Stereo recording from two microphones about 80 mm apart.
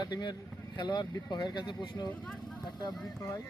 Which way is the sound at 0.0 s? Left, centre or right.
Left.